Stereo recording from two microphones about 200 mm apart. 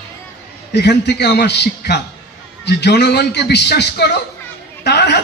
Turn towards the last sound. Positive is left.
turn(degrees=60)  # may be behind; listen again after turning